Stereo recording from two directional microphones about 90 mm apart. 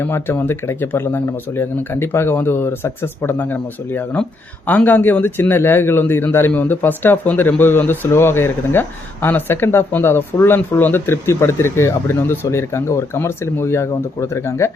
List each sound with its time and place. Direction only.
0.0 s speech: 25° left (ahead or behind)